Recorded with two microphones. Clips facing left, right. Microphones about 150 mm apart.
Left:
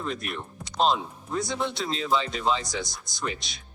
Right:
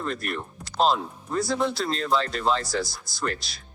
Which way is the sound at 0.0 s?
Centre (ahead or behind).